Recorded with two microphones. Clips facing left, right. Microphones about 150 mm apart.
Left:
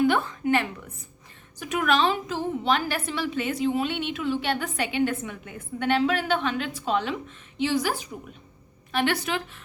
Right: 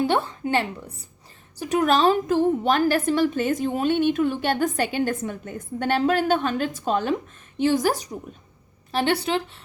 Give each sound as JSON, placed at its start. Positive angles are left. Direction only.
{"t": 0.0, "sound": "a woman's voice", "side_deg": -30}